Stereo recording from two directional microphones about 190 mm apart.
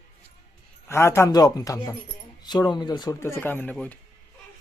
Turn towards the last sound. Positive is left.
turn(degrees=5)  # may be behind; listen again after turning